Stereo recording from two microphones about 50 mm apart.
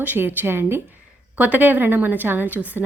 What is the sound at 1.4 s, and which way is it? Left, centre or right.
A woman's voice, right.